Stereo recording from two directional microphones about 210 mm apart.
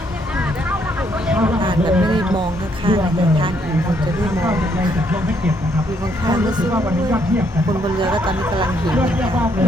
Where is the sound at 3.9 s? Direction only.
15° right (ahead or behind).